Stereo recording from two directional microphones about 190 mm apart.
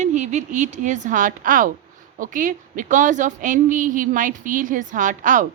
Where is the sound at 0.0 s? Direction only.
40° right (ahead or behind).